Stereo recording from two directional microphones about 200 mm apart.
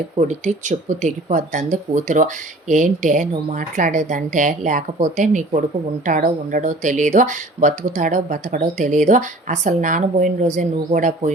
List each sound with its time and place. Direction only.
0.2 s speech: 40° right (ahead or behind)